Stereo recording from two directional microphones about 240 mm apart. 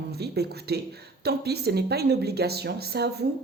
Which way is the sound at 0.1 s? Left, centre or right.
Right.